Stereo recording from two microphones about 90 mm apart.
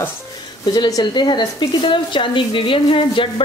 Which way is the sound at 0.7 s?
45° left (ahead or behind).